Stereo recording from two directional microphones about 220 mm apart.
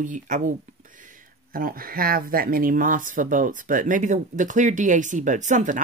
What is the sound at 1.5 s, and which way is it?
Speech, 40° right (ahead or behind).